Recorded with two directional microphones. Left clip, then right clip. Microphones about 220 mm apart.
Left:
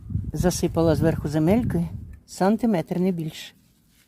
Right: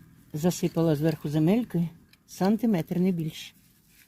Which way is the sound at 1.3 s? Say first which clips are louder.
Left 3 dB; 35° left (ahead or behind).